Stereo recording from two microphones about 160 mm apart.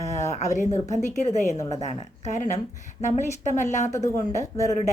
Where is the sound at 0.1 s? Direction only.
45° left (ahead or behind).